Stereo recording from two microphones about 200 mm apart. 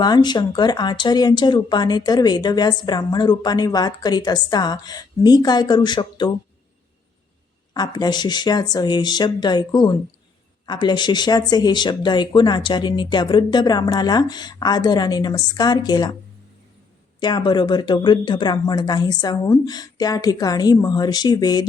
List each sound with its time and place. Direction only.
0.0 s speech: 20° left (ahead or behind)
7.7 s speech: 20° left (ahead or behind)
17.2 s speech: 20° left (ahead or behind)